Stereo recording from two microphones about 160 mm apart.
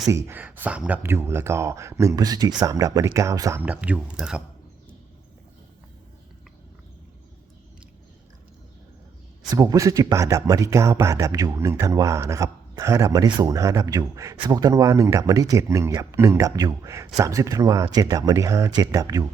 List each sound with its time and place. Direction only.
0.1 s speech: 15° right (ahead or behind)
9.5 s speech: 20° right (ahead or behind)